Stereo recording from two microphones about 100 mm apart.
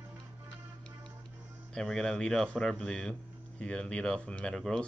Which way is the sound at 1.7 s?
5° left (ahead or behind).